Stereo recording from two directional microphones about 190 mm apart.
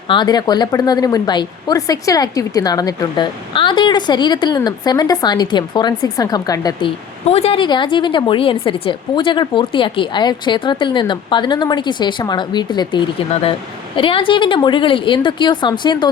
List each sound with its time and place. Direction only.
0.1 s a woman's voice: 25° left (ahead or behind)